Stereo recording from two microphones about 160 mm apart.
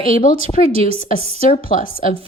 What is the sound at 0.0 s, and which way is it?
A woman's voice, 60° left (ahead or behind).